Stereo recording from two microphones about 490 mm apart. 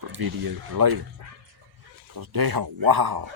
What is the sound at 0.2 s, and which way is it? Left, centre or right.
Speech, right.